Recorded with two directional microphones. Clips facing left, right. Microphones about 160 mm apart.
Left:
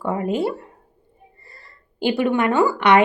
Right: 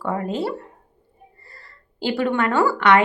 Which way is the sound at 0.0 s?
15° left (ahead or behind).